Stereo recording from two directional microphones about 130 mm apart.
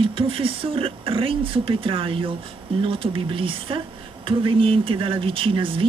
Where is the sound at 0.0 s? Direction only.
45° right (ahead or behind).